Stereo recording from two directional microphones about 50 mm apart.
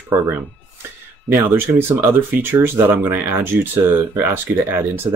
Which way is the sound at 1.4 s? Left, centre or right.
Right.